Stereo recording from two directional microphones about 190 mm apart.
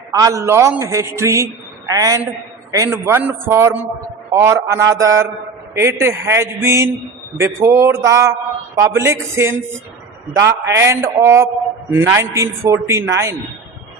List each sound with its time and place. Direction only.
0.1 s a man's voice: 15° right (ahead or behind)
10.8 s a man's voice: 15° right (ahead or behind)